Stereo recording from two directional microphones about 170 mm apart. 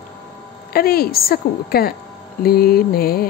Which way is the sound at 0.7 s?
65° left (ahead or behind).